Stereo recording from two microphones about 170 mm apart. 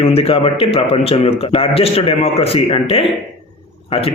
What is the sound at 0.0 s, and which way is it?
Speech, 35° left (ahead or behind).